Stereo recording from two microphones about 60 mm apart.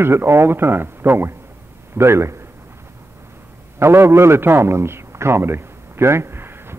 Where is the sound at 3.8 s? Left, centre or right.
Right.